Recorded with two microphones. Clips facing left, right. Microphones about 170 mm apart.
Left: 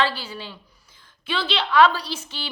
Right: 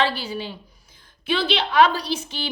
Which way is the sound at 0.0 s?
15° right (ahead or behind).